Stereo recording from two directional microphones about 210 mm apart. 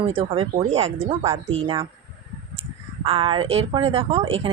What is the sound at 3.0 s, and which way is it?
Speech, 25° right (ahead or behind).